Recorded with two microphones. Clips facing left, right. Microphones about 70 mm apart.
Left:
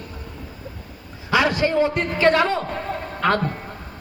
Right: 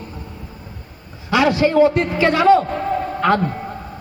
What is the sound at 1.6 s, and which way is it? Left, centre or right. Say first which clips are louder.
A man's voice: right 6 dB; centre.